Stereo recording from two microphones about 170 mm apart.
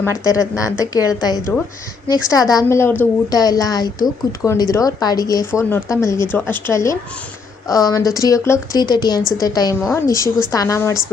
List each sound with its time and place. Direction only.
0.0 s a woman's voice: 20° left (ahead or behind)